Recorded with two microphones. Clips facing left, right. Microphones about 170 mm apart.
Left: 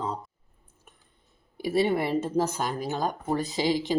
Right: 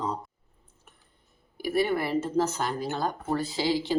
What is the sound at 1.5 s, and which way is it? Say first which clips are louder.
Speech: left 2 dB; 25° left (ahead or behind).